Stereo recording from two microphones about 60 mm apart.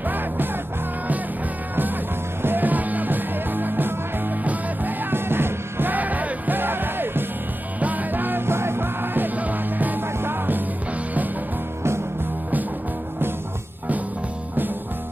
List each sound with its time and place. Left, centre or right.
2.4 s music: right